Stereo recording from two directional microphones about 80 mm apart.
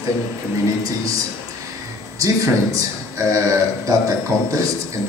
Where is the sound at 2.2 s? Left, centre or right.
Right.